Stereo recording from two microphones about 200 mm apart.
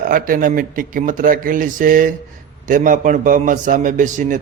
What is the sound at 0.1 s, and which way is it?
A man's voice, 45° right (ahead or behind).